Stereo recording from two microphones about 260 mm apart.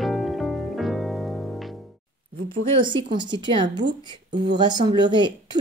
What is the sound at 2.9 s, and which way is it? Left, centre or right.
A woman's voice, centre.